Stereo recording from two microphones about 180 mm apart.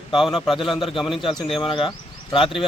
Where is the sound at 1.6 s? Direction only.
30° left (ahead or behind).